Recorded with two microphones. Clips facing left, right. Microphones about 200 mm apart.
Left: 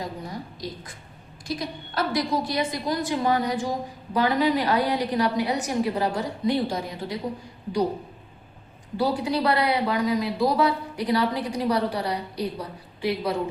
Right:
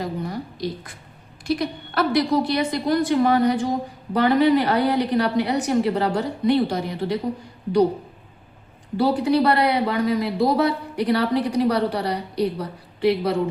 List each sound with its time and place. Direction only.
0.0 s a woman's voice: 65° right (ahead or behind)
9.0 s a woman's voice: 60° right (ahead or behind)